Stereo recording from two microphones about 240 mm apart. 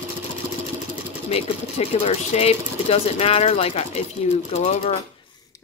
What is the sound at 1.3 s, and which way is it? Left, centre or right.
Speech, left.